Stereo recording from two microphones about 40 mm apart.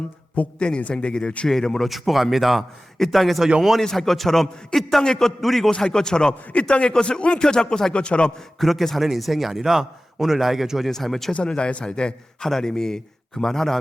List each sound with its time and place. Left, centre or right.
0.4 s a man's voice: left
0.9 s a man's voice: left
1.5 s a man's voice: centre
1.9 s a man's voice: centre
5.0 s a man's voice: centre
5.4 s a man's voice: centre
5.7 s a man's voice: centre
8.5 s a man's voice: centre
10.9 s a man's voice: centre
11.3 s a man's voice: left
12.4 s a man's voice: centre